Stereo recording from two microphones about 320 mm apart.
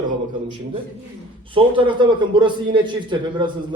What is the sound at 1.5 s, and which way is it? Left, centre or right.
A man's voice, centre.